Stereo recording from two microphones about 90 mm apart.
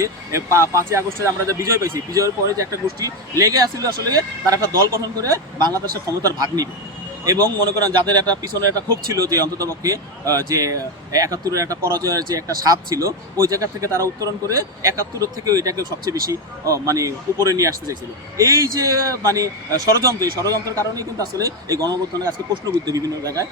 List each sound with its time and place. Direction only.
0.0 s speech: 35° right (ahead or behind)
5.5 s speech: 50° right (ahead or behind)
7.8 s speech: 45° right (ahead or behind)